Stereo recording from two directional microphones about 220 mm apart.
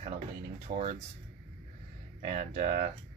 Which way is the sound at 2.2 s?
35° right (ahead or behind).